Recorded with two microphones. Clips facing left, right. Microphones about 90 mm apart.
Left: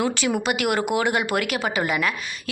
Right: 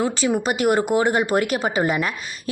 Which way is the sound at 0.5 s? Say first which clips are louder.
Right 6 dB; 40° right (ahead or behind).